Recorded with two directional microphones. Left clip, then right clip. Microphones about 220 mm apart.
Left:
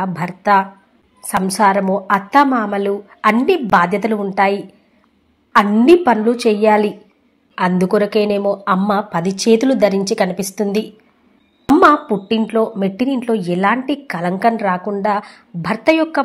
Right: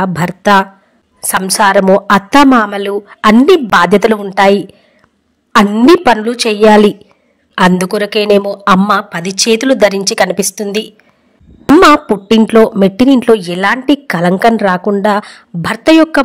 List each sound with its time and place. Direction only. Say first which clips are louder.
0.0 s a woman's voice: right 7 dB; 40° right (ahead or behind)
12.4 s a woman's voice: right 12 dB; 45° right (ahead or behind)